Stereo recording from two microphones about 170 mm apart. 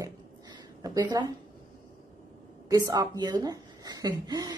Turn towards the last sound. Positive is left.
turn(degrees=-20)  # may be behind; listen again after turning